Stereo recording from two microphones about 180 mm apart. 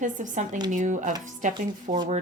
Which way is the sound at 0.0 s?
45° right (ahead or behind).